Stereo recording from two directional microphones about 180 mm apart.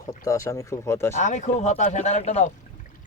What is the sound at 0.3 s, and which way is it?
Speech, 15° left (ahead or behind).